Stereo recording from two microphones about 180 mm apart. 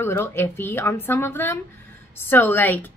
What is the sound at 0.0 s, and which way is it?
A woman's voice, 15° left (ahead or behind).